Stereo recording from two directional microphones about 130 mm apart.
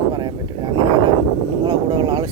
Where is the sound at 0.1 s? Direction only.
35° right (ahead or behind).